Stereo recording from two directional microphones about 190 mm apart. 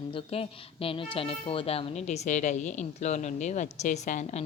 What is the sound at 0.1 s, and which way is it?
A woman's voice, 30° left (ahead or behind).